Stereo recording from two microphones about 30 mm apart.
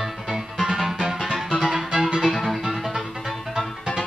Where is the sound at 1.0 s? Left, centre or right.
Right.